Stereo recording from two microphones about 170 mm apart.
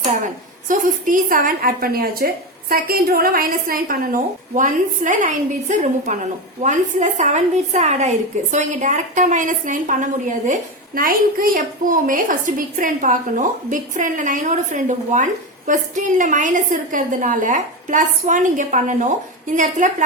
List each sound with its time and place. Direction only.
0.7 s a woman's voice: 50° right (ahead or behind)